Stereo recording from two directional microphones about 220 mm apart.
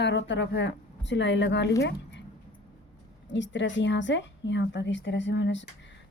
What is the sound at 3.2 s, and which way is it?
A woman's voice, 55° left (ahead or behind).